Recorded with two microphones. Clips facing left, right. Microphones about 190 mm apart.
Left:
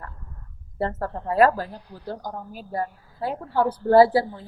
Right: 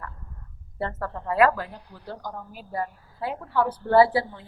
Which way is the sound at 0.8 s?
35° left (ahead or behind).